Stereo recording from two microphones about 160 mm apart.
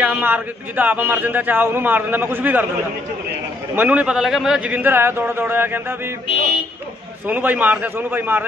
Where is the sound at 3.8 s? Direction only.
10° right (ahead or behind).